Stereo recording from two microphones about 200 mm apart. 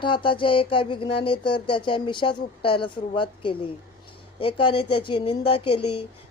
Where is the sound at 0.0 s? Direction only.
25° left (ahead or behind).